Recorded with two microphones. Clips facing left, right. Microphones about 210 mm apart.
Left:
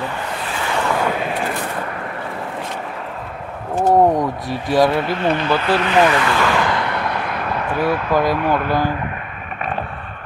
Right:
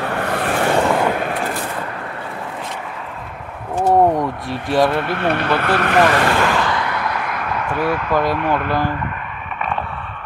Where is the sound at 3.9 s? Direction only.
Centre (ahead or behind).